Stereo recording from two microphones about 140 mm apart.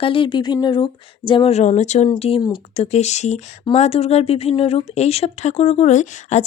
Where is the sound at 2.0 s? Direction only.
45° left (ahead or behind).